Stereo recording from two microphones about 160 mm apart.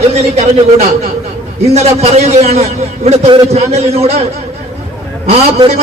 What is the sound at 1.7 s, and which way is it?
A man's voice, 40° right (ahead or behind).